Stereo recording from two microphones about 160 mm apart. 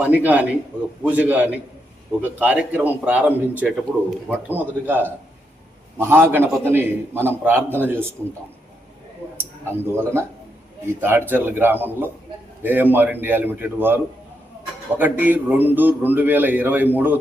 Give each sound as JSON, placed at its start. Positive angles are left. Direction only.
{"t": 0.0, "sound": "a man's voice", "side_deg": -10}
{"t": 9.4, "sound": "a man's voice", "side_deg": -15}